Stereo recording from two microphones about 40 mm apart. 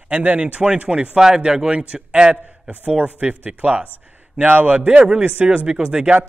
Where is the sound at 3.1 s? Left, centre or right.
Right.